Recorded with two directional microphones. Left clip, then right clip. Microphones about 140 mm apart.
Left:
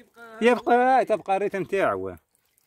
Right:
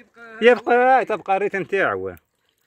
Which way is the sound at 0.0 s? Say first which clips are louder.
Right 4 dB; 45° left (ahead or behind).